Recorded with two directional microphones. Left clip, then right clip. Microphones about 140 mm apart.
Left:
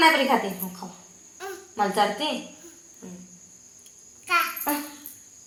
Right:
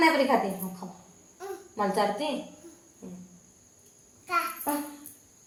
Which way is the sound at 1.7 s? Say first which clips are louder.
Left 4 dB; 10° left (ahead or behind).